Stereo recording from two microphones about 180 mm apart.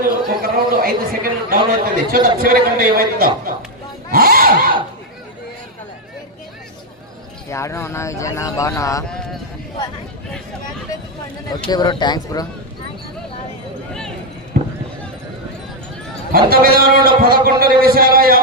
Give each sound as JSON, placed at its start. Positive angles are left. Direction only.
{"t": 0.0, "sound": "a man's voice", "side_deg": -55}
{"t": 7.5, "sound": "speech", "side_deg": 15}
{"t": 9.0, "sound": "speech", "side_deg": 5}
{"t": 11.7, "sound": "speech", "side_deg": 25}
{"t": 14.5, "sound": "basketball bounce", "side_deg": -55}
{"t": 16.3, "sound": "a man's voice", "side_deg": -55}